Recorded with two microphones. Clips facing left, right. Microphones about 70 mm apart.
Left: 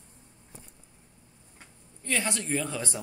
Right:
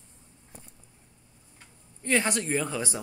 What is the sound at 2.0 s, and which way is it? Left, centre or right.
Speech, centre.